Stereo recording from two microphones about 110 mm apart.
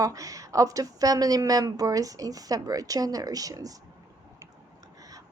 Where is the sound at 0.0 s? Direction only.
30° right (ahead or behind).